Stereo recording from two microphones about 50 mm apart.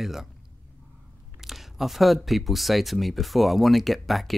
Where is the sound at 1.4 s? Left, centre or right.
Centre.